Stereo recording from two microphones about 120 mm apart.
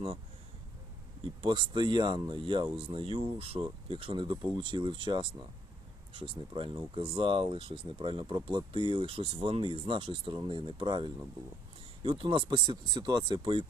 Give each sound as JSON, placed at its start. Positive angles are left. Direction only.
{"t": 1.4, "sound": "speech", "side_deg": -45}